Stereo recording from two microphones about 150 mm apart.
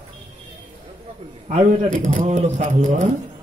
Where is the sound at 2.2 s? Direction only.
50° right (ahead or behind).